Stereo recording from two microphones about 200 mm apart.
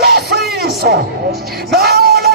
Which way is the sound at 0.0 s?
55° right (ahead or behind).